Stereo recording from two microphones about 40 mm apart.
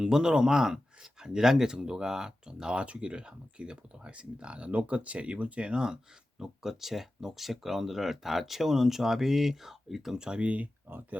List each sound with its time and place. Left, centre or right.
0.0 s speech: centre
2.8 s speech: right
6.4 s speech: centre
10.2 s speech: centre
10.9 s speech: right